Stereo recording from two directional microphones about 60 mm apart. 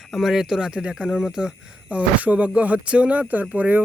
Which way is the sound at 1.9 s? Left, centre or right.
Right.